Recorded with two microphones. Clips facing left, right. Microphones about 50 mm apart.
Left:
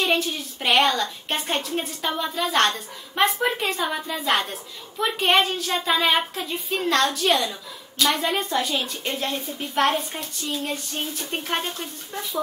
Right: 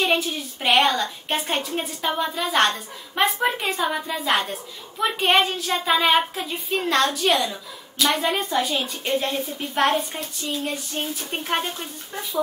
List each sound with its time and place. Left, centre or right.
0.0 s a woman's voice: centre